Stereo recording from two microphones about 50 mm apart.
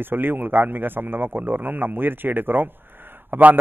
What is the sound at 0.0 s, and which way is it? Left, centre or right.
A man's voice, right.